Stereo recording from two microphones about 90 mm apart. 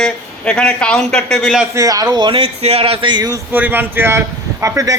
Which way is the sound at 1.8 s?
40° right (ahead or behind).